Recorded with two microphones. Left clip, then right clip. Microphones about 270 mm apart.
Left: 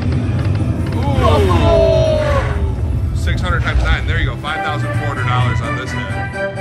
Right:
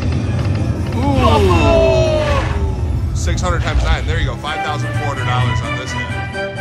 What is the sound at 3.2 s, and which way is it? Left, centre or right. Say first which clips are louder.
Speech: even; centre.